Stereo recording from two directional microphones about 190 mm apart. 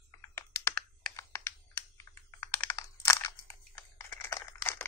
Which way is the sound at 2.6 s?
15° left (ahead or behind).